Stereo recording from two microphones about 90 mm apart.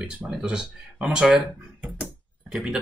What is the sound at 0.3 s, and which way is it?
Speech, 5° right (ahead or behind).